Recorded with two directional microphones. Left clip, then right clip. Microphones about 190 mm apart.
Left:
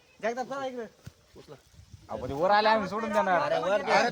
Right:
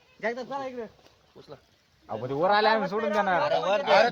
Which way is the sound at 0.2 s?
40° right (ahead or behind).